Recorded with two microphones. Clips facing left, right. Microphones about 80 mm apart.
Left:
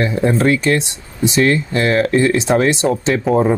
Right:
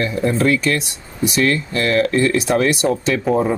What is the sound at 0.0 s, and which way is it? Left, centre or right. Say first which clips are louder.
Speech: left 2 dB; left.